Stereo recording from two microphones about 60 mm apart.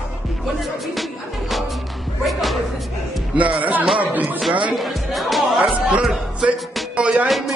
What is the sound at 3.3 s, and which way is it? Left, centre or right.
Music, right.